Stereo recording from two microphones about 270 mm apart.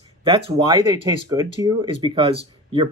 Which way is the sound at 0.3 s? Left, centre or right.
Right.